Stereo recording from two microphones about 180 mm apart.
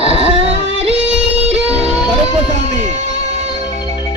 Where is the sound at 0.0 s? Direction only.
35° right (ahead or behind).